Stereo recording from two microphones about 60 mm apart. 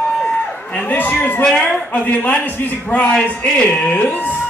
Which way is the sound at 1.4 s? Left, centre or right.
Centre.